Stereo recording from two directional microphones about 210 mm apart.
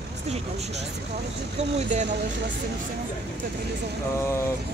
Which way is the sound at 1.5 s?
30° right (ahead or behind).